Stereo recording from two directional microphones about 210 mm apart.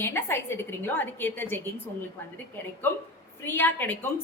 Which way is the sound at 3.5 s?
10° left (ahead or behind).